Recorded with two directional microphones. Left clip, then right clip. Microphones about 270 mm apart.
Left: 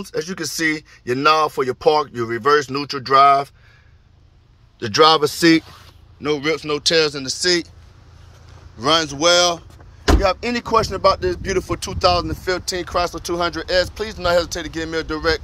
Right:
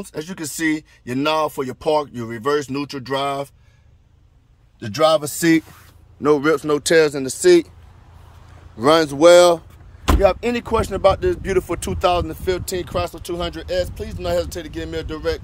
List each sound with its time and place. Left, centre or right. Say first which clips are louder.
0.1 s speech: left 7 dB; centre
4.7 s speech: left 3 dB; centre
6.2 s speech: right 4 dB; right
8.8 s speech: right 4 dB; right
10.2 s speech: right 2 dB; centre